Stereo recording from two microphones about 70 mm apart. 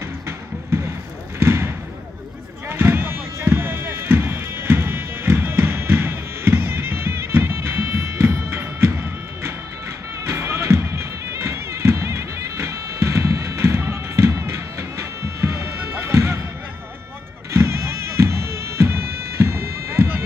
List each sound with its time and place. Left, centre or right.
1.4 s basketball bounce: right
2.7 s a sound: right
10.2 s music: right
17.5 s bagpipes: right